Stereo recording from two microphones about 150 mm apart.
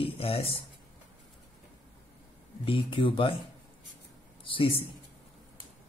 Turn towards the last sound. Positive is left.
turn(degrees=35)  # may be behind; listen again after turning